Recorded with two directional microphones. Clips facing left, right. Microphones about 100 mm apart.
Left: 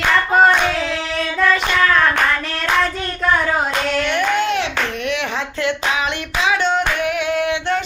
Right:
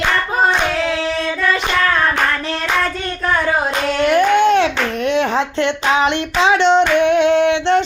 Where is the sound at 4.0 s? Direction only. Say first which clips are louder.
Right 8 dB; 30° right (ahead or behind).